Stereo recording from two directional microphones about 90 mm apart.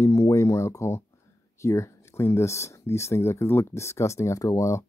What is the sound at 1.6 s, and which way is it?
Speech, 35° left (ahead or behind).